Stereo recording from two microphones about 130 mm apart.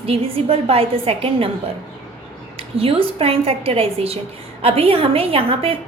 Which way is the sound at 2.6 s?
45° right (ahead or behind).